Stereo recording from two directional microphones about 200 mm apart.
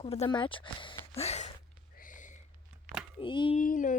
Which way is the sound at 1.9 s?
40° left (ahead or behind).